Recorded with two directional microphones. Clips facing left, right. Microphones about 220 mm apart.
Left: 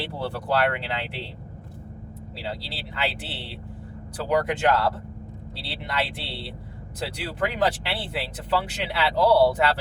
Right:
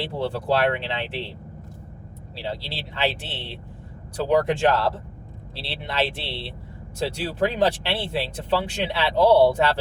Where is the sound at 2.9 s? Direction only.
25° right (ahead or behind).